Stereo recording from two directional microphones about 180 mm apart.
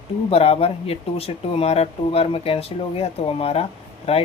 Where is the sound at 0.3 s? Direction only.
35° left (ahead or behind).